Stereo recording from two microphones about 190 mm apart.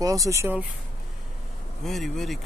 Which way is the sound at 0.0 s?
20° right (ahead or behind).